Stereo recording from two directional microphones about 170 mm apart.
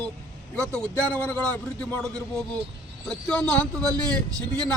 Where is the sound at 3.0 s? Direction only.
5° left (ahead or behind).